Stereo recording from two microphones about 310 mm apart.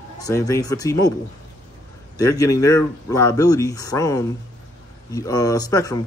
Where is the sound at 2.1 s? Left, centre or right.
Centre.